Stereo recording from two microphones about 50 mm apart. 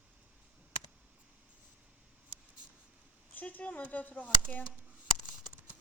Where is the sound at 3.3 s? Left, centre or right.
Left.